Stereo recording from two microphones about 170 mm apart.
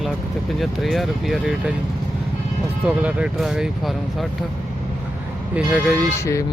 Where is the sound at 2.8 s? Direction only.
5° right (ahead or behind).